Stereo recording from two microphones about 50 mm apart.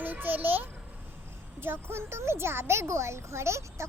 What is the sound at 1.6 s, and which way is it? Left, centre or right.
Speech, right.